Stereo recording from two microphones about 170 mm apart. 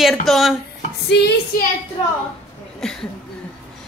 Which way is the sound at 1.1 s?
80° left.